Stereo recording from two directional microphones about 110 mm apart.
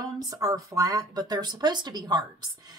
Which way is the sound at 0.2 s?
35° right (ahead or behind).